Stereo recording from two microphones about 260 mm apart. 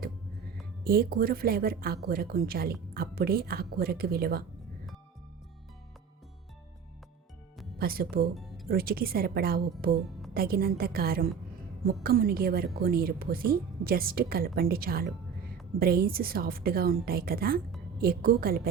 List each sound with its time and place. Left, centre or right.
0.9 s a woman's voice: right
7.8 s a woman's voice: right
8.4 s music: centre
8.7 s a woman's voice: right